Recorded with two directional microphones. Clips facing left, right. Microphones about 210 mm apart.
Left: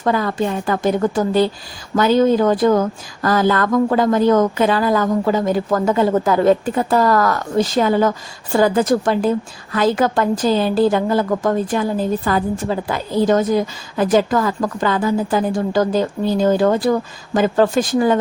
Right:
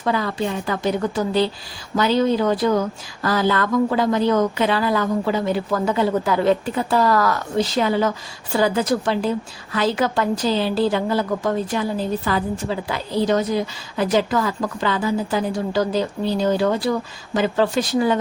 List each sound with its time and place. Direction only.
0.0 s a woman's voice: 45° left (ahead or behind)